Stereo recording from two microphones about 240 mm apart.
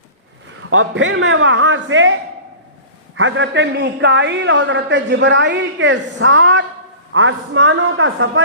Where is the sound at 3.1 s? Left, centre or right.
Right.